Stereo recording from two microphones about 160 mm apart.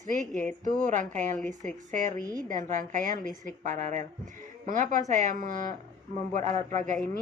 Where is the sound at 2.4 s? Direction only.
55° right (ahead or behind).